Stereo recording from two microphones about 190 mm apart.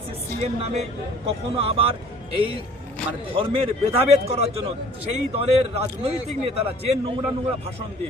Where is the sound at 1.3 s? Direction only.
30° right (ahead or behind).